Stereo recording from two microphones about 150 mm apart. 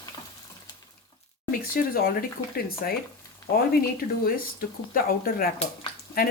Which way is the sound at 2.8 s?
90° left.